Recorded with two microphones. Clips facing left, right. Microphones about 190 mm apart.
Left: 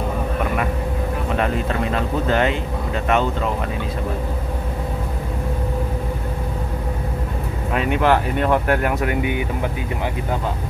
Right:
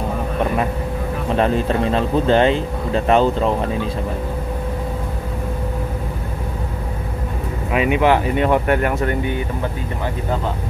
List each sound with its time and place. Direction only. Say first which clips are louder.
1.3 s speech: right 5 dB; 30° right (ahead or behind)
7.7 s speech: right 2 dB; 5° right (ahead or behind); by 9.4 s 10° left (ahead or behind)